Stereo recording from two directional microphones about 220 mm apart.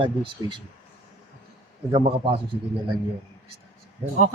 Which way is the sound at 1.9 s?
25° right (ahead or behind).